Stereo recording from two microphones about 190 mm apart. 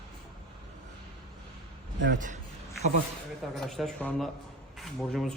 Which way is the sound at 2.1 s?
40° right (ahead or behind).